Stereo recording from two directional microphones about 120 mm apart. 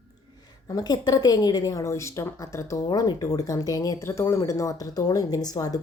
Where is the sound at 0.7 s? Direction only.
35° left (ahead or behind).